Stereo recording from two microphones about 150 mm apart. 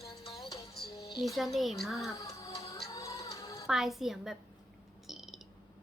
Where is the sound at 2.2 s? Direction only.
20° left (ahead or behind).